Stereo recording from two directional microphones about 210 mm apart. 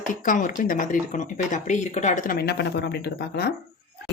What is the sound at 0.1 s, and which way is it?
A woman's voice, 40° left (ahead or behind).